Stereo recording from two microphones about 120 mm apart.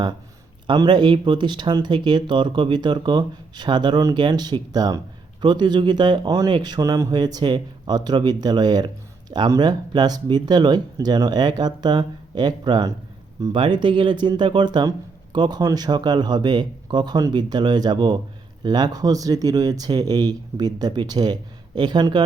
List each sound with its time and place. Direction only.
0.7 s speech: 40° right (ahead or behind)